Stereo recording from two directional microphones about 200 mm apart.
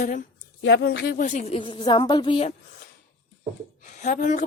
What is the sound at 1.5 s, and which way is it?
Speech, 25° left (ahead or behind).